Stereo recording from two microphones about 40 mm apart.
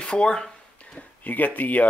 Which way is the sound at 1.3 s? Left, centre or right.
Left.